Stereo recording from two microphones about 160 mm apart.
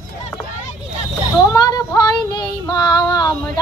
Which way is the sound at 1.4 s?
25° left (ahead or behind).